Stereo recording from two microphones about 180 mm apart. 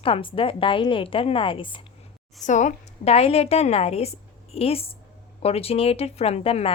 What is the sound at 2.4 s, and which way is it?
A woman's voice, 40° left (ahead or behind).